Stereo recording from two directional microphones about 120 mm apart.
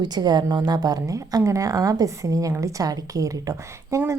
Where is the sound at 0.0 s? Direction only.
35° right (ahead or behind).